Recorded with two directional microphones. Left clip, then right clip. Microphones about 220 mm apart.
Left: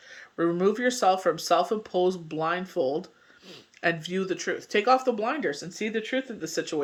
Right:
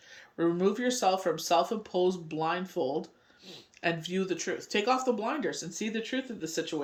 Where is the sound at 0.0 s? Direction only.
15° left (ahead or behind).